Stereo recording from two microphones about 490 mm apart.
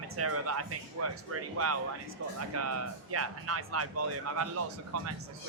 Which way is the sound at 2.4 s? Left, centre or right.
Right.